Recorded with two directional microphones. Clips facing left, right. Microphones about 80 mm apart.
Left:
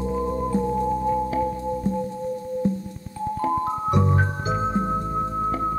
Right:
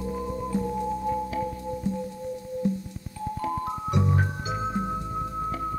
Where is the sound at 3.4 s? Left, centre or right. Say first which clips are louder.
Left 6 dB; left.